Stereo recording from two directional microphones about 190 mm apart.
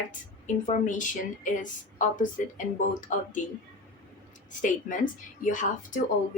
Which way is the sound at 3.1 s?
40° left (ahead or behind).